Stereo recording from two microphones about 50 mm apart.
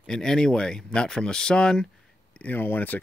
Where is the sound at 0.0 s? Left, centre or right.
Centre.